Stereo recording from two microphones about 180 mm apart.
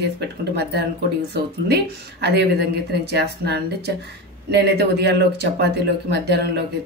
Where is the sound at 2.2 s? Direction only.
70° right (ahead or behind).